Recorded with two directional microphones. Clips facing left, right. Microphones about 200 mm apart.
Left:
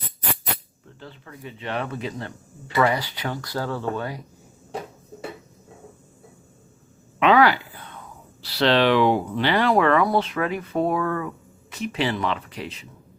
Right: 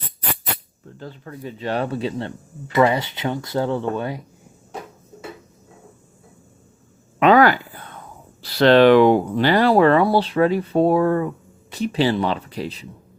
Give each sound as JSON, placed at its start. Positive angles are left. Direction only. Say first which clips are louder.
{"t": 0.9, "sound": "speech", "louder": "right 6 dB", "side_deg": -40}
{"t": 7.2, "sound": "a sound", "louder": "right 3 dB", "side_deg": -45}
{"t": 8.4, "sound": "speech", "louder": "right 7 dB", "side_deg": -50}